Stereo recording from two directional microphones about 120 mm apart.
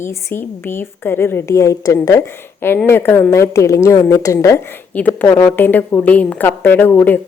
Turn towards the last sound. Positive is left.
turn(degrees=15)  # may be behind; listen again after turning